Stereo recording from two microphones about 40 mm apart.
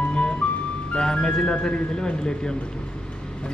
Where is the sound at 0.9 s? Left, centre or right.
Left.